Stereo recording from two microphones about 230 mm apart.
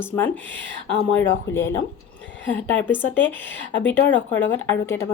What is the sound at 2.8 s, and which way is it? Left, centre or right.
Speech, centre.